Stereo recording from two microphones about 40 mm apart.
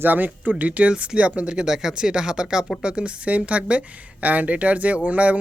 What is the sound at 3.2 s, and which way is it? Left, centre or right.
Speech, right.